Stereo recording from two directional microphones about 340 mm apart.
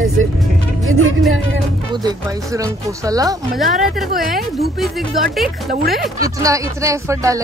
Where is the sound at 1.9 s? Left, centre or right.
Centre.